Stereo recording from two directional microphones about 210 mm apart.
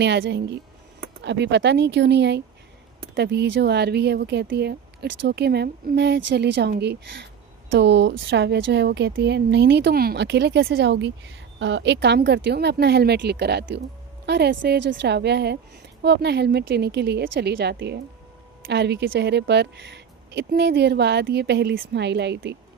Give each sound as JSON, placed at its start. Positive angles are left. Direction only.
{"t": 0.0, "sound": "speech", "side_deg": -55}